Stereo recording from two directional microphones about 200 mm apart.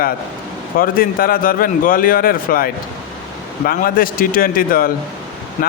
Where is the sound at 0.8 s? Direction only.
45° left (ahead or behind).